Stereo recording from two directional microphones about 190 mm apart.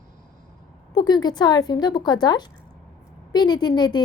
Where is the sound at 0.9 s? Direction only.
20° left (ahead or behind).